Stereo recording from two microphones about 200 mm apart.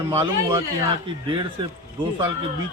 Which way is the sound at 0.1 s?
30° right (ahead or behind).